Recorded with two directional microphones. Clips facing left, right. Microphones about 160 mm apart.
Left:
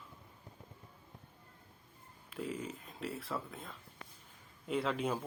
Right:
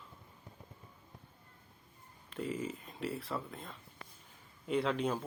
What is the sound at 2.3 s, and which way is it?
Speech, centre (ahead or behind).